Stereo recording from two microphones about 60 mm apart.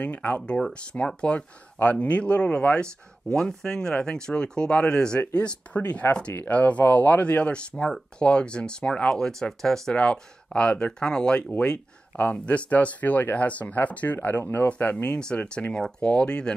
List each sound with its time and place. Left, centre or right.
0.0 s speech: left
6.0 s speech: left
6.5 s speech: left
15.1 s speech: centre